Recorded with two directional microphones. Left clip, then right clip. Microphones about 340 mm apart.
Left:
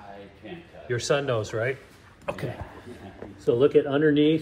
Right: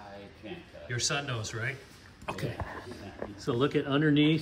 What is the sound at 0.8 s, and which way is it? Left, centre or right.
Speech, centre.